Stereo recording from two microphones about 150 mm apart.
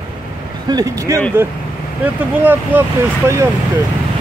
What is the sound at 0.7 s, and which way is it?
Speech, 25° right (ahead or behind).